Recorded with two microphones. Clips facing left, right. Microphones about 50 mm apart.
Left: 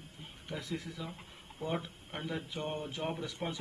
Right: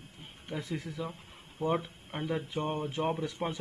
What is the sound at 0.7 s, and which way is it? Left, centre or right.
Speech, right.